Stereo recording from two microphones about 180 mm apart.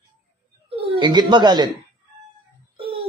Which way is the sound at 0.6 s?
25° right (ahead or behind).